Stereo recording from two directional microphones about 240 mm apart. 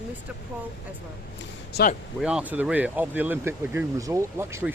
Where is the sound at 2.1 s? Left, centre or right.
Centre.